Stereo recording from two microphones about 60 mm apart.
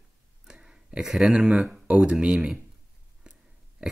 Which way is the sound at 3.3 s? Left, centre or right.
Centre.